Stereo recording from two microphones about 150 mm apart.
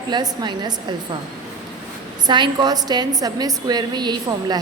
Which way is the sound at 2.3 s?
30° right (ahead or behind).